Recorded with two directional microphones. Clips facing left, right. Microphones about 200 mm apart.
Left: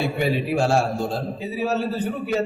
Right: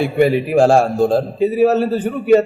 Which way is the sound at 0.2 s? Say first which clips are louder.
Right 11 dB; 55° right (ahead or behind).